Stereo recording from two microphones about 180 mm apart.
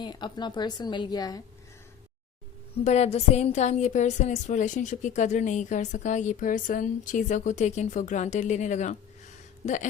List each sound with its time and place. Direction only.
0.0 s a woman's voice: 25° left (ahead or behind)
2.7 s a woman's voice: 35° left (ahead or behind)